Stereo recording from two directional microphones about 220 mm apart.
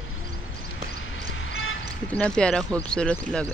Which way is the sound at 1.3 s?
60° left (ahead or behind).